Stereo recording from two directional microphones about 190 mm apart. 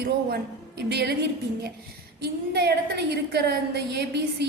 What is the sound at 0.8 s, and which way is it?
Speech, 60° right (ahead or behind).